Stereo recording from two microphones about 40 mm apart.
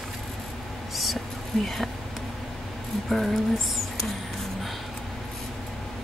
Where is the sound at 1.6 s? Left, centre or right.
Centre.